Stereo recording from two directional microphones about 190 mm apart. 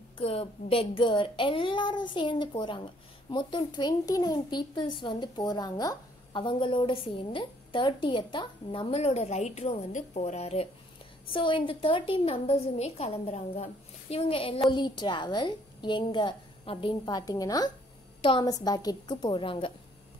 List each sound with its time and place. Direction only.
0.2 s speech: 30° left (ahead or behind)